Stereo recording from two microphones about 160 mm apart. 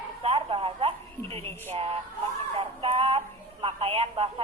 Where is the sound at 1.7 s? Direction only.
35° right (ahead or behind).